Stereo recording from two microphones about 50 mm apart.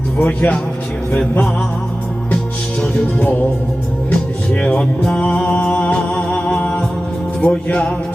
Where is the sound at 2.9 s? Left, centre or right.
Left.